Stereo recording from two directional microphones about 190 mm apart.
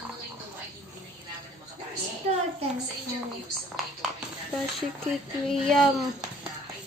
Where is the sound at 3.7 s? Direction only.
Centre (ahead or behind).